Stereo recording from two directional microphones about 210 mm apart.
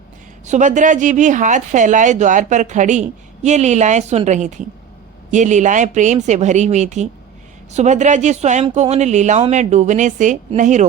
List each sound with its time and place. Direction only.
0.4 s a woman's voice: 35° right (ahead or behind)